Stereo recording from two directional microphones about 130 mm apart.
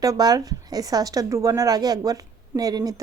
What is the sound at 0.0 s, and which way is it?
A woman's voice, 30° right (ahead or behind).